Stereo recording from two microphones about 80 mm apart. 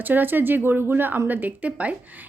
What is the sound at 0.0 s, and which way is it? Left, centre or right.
Speech, right.